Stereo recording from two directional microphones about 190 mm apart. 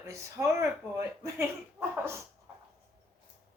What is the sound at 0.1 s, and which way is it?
Speech, 15° right (ahead or behind).